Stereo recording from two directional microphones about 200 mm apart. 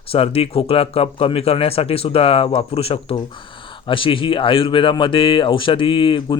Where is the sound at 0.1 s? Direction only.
30° left (ahead or behind).